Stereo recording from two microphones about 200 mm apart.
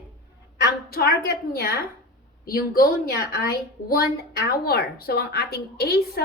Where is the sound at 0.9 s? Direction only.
50° left (ahead or behind).